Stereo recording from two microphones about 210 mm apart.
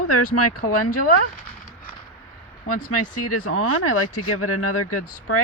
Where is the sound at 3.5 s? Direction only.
90° left.